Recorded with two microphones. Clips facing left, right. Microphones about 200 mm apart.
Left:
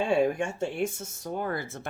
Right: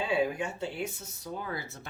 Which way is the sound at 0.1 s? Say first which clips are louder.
Left 3 dB; 45° left (ahead or behind).